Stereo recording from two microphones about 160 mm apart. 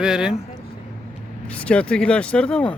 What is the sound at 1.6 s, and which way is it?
Speech, 5° left (ahead or behind).